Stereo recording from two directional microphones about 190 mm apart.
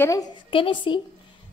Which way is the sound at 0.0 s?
20° left (ahead or behind).